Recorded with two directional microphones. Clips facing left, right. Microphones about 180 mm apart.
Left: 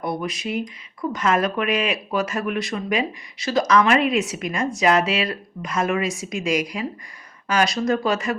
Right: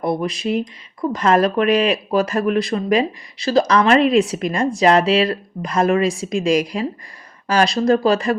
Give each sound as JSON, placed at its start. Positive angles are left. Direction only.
{"t": 0.0, "sound": "speech", "side_deg": -30}